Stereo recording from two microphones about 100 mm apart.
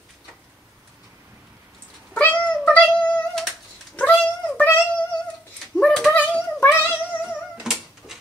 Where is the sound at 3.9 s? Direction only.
15° left (ahead or behind).